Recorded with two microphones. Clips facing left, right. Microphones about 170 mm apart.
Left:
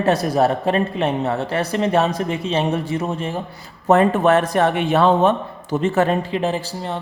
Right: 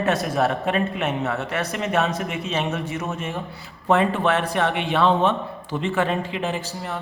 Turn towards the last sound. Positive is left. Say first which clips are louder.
# left 4 dB
turn(degrees=30)  # may be behind; listen again after turning